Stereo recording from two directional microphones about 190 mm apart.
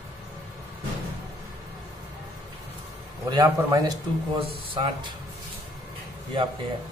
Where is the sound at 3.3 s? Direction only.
20° right (ahead or behind).